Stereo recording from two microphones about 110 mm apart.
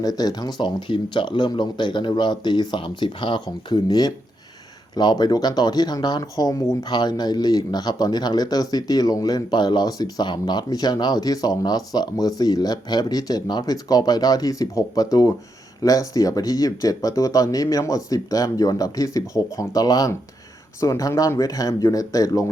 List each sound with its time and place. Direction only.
0.0 s speech: 35° left (ahead or behind)